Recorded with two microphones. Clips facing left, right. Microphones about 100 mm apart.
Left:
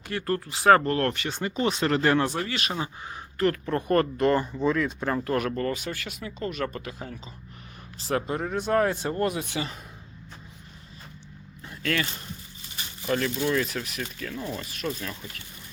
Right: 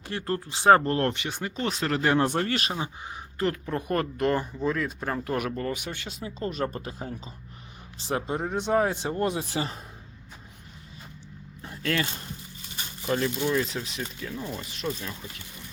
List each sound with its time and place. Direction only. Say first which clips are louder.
0.1 s speech: left 2 dB; 25° right (ahead or behind)
1.1 s speech: left 1 dB; 15° right (ahead or behind)
1.4 s speech: left 7 dB; centre (ahead or behind)
2.2 s speech: right 3 dB; 50° right (ahead or behind)
2.7 s speech: left 1 dB; 20° right (ahead or behind)
9.3 s speech: right 1 dB; 35° right (ahead or behind)
11.6 s vehicle: even; 30° right (ahead or behind)
13.1 s speech: even; 25° right (ahead or behind)